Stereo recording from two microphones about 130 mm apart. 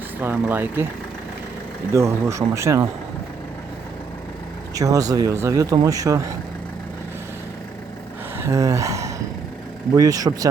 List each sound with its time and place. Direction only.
0.2 s speech: 15° right (ahead or behind)
1.9 s speech: 20° right (ahead or behind)
4.7 s speech: 25° right (ahead or behind)
8.4 s a sound: 25° right (ahead or behind)
9.9 s speech: 25° right (ahead or behind)